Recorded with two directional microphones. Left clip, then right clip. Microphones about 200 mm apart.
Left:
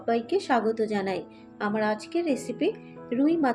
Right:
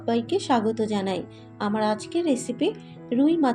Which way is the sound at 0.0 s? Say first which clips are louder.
Right 1 dB; 20° right (ahead or behind).